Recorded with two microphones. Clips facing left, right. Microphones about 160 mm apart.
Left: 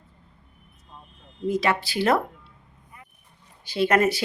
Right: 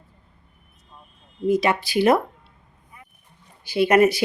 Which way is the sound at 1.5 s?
15° right (ahead or behind).